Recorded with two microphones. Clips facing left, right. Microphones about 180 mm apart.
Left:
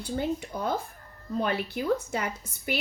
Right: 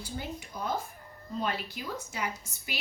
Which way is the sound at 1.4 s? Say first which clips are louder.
Left 5 dB; 60° left (ahead or behind).